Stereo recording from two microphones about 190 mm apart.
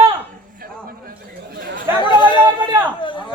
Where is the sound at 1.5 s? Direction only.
50° right (ahead or behind).